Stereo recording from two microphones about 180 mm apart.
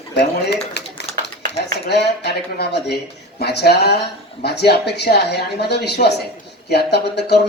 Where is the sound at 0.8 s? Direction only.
70° left (ahead or behind).